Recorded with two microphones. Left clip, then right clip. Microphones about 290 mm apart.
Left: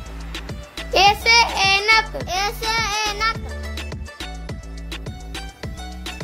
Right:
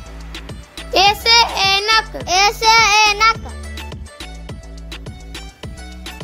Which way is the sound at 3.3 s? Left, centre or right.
Centre.